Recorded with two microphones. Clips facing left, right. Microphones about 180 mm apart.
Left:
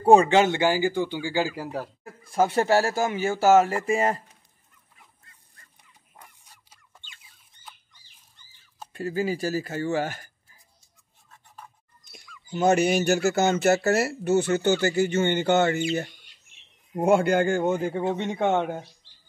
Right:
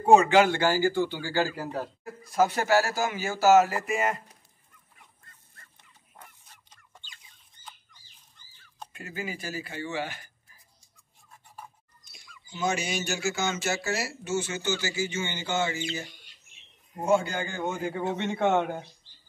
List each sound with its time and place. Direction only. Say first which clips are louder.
0.0 s speech: left 2 dB; 35° left (ahead or behind); by 1.8 s 10° left (ahead or behind)
2.2 s a man's voice: left 3 dB; 30° left (ahead or behind)
6.1 s fowl: even; 10° left (ahead or behind)
8.9 s speech: left 10 dB; 35° left (ahead or behind)
11.2 s scratch: right 1 dB; 10° right (ahead or behind)
12.0 s speech: left 5 dB; 60° left (ahead or behind)
16.9 s a man's voice: left 5 dB; 60° left (ahead or behind)
18.1 s speech: right 2 dB; 15° left (ahead or behind)
19.0 s music: even; 80° left